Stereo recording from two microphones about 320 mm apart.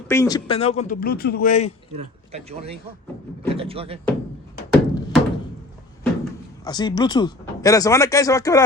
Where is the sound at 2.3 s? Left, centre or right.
Centre.